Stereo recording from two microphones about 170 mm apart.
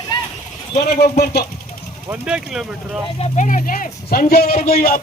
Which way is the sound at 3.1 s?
40° left (ahead or behind).